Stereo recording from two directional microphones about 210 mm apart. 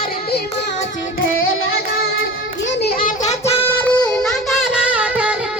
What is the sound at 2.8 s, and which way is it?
Children playing, 45° left (ahead or behind).